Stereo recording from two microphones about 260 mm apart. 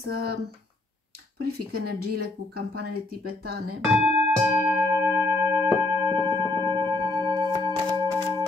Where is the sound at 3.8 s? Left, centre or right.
Centre.